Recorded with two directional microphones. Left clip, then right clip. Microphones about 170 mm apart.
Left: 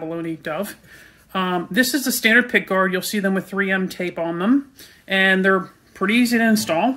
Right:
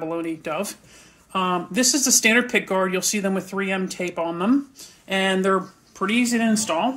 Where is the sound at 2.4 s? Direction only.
15° left (ahead or behind).